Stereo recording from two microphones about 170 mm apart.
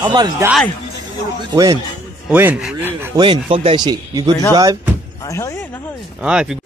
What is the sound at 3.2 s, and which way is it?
Speech, 30° right (ahead or behind).